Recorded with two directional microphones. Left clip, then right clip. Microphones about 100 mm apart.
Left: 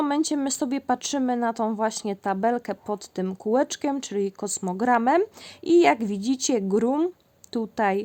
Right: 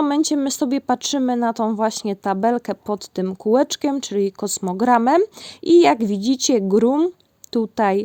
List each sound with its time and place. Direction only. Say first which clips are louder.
0.0 s a woman's voice: right 5 dB; 40° right (ahead or behind)